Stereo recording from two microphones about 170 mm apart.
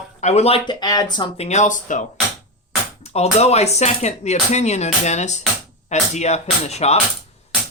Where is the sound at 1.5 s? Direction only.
45° left (ahead or behind).